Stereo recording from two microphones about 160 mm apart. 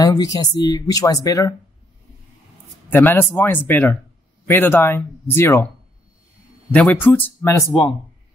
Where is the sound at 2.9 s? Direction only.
15° left (ahead or behind).